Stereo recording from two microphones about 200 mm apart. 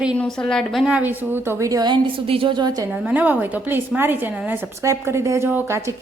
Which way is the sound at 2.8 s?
5° right (ahead or behind).